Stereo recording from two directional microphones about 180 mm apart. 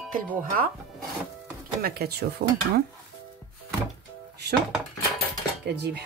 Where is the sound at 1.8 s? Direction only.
60° right (ahead or behind).